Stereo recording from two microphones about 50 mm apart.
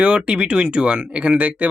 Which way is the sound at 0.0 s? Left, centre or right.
Centre.